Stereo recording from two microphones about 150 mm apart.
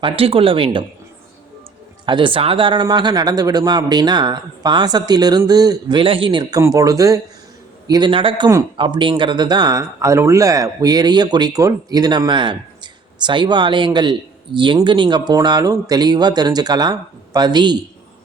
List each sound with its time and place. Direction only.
0.0 s speech: 40° right (ahead or behind)
2.0 s speech: 35° right (ahead or behind)